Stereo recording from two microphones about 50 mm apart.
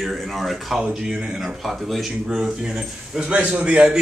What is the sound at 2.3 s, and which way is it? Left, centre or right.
A man's voice, centre.